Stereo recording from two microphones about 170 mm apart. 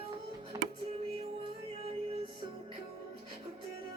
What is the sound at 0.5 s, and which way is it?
Music, 20° right (ahead or behind).